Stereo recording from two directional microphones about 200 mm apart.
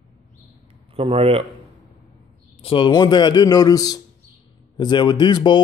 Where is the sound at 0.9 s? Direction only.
30° right (ahead or behind).